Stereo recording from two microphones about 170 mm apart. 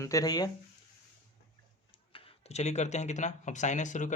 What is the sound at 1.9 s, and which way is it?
Speech, 35° left (ahead or behind).